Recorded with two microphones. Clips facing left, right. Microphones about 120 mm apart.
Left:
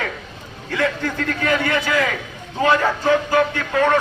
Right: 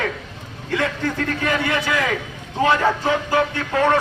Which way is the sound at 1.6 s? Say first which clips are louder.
Left 1 dB; 20° right (ahead or behind).